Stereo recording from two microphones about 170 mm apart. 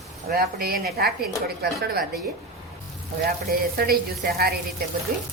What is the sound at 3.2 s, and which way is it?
A woman's voice, 60° right (ahead or behind).